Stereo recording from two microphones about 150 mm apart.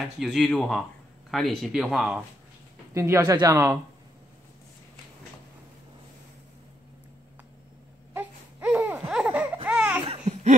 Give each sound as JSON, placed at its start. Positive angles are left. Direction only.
{"t": 0.2, "sound": "speech", "side_deg": 5}
{"t": 2.9, "sound": "speech", "side_deg": -20}
{"t": 8.1, "sound": "baby cry", "side_deg": -10}
{"t": 9.7, "sound": "laughter", "side_deg": -5}